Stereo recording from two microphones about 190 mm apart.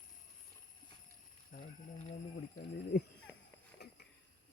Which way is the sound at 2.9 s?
60° left (ahead or behind).